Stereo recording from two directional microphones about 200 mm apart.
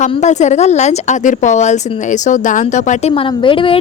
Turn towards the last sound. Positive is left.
turn(degrees=25)  # may be behind; listen again after turning